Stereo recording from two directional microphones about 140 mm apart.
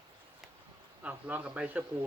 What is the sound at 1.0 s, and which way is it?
Speech, 10° right (ahead or behind).